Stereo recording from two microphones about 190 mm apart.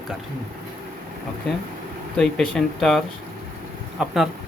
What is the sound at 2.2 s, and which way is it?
Speech, 5° left (ahead or behind).